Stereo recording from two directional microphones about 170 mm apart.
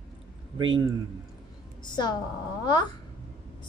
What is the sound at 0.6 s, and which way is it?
Speech, 30° right (ahead or behind).